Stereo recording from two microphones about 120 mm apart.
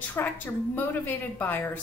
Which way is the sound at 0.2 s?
20° left (ahead or behind).